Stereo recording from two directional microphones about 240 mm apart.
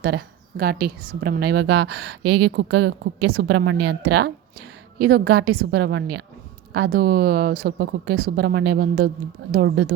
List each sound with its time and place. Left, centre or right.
0.0 s a woman's voice: right